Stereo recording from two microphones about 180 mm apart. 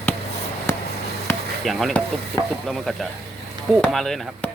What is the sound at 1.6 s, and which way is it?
Speech, centre (ahead or behind).